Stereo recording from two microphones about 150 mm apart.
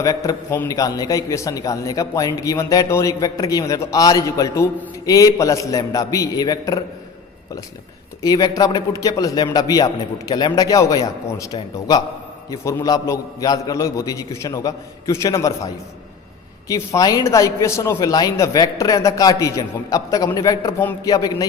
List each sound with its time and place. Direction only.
0.0 s a man's voice: 25° left (ahead or behind)
8.2 s a man's voice: 25° left (ahead or behind)
12.5 s a man's voice: 25° left (ahead or behind)